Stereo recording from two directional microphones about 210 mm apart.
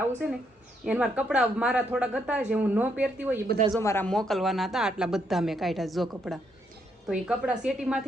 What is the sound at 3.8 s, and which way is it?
A woman's voice, 10° left (ahead or behind).